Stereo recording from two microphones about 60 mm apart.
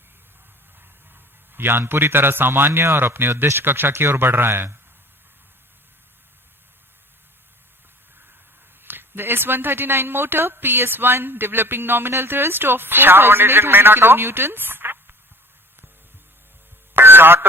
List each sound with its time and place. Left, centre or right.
1.5 s speech: right
8.8 s speech: right
16.9 s a sound: right